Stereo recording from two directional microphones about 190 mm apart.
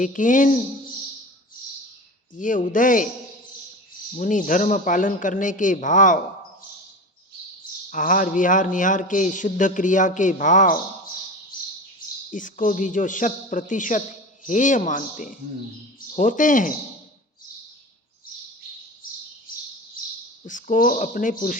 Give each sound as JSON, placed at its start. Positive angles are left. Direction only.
{"t": 0.0, "sound": "a man's voice", "side_deg": 45}
{"t": 2.3, "sound": "a man's voice", "side_deg": 45}
{"t": 4.1, "sound": "a man's voice", "side_deg": 45}
{"t": 7.9, "sound": "a man's voice", "side_deg": 45}
{"t": 12.3, "sound": "a man's voice", "side_deg": 45}
{"t": 20.4, "sound": "a man's voice", "side_deg": 45}